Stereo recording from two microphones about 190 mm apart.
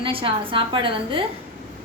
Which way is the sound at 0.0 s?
30° right (ahead or behind).